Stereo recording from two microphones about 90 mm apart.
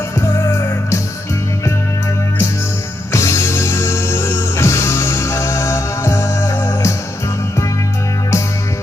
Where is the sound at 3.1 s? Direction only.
30° left (ahead or behind).